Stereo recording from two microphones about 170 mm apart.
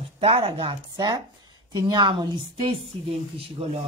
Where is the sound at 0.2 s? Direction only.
35° right (ahead or behind).